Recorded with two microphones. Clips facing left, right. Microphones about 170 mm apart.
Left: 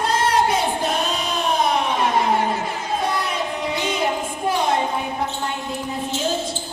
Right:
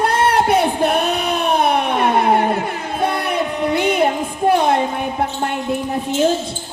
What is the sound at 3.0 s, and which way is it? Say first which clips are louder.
Music: right 8 dB; 60° right (ahead or behind).